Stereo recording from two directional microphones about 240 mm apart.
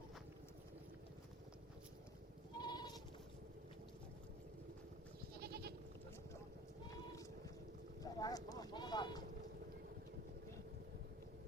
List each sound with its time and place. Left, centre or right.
2.6 s goat: centre
5.4 s goat: right
8.0 s sheep: centre